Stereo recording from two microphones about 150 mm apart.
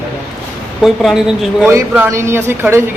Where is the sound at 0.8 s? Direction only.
Centre (ahead or behind).